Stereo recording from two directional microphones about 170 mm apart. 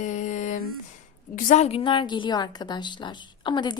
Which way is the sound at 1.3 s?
50° left (ahead or behind).